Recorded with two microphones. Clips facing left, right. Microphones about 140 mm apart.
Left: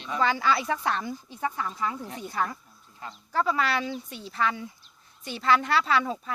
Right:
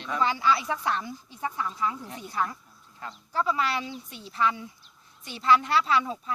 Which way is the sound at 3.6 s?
5° right (ahead or behind).